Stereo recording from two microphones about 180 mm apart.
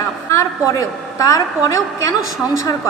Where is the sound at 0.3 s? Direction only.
15° left (ahead or behind).